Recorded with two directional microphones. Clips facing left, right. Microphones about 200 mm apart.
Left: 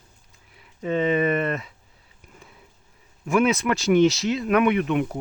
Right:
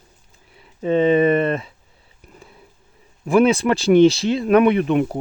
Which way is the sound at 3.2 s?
30° right (ahead or behind).